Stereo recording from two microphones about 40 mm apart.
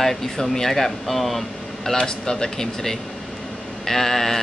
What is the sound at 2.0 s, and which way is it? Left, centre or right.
Speech, centre.